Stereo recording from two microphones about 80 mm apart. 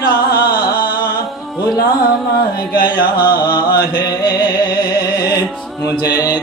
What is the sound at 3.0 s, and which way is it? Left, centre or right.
Music, left.